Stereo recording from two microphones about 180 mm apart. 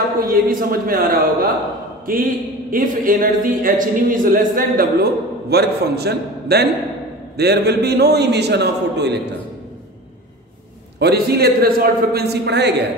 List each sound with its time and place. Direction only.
0.2 s a man's voice: 50° right (ahead or behind); by 9.3 s 70° right (ahead or behind)
11.0 s a man's voice: 65° right (ahead or behind)